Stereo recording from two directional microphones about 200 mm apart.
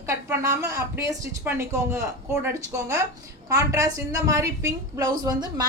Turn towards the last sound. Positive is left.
turn(degrees=-20)  # may be behind; listen again after turning